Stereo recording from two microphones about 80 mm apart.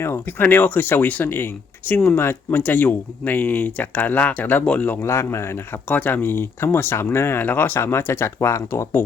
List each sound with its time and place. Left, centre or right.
0.0 s speech: left
5.0 s speech: left
5.9 s speech: left